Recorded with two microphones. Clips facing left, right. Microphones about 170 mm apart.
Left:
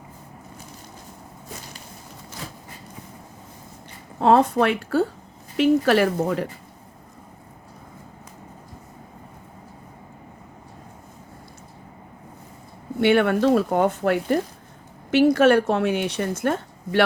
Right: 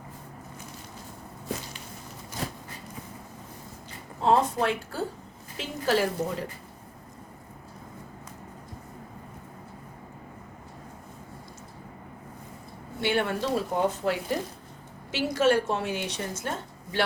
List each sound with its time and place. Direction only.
4.2 s speech: 65° left (ahead or behind)
13.0 s a woman's voice: 60° left (ahead or behind)